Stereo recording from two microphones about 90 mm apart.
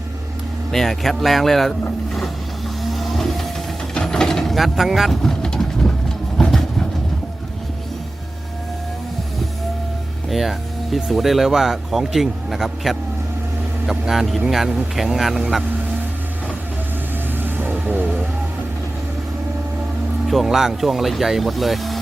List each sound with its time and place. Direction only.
0.7 s speech: 5° left (ahead or behind)
2.9 s vehicle: centre (ahead or behind)
3.9 s mechanisms: 5° left (ahead or behind)
6.3 s vehicle: 5° left (ahead or behind)
10.2 s speech: centre (ahead or behind)
17.4 s vehicle: 20° right (ahead or behind)
20.2 s speech: centre (ahead or behind)